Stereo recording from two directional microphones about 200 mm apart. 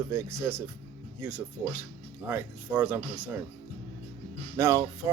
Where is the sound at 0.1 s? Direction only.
15° right (ahead or behind).